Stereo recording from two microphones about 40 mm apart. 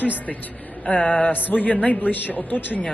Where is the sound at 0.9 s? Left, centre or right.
Left.